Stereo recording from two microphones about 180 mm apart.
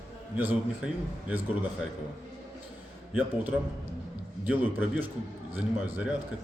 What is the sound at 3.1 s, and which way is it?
A woman's voice, 10° right (ahead or behind).